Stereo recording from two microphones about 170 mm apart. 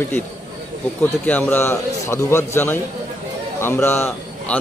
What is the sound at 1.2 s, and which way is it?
A man's voice, 10° left (ahead or behind).